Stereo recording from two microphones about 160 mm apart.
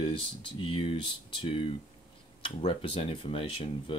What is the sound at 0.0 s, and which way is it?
Speech, 30° left (ahead or behind).